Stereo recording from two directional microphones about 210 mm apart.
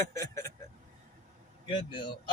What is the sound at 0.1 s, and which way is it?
Speech, 15° left (ahead or behind).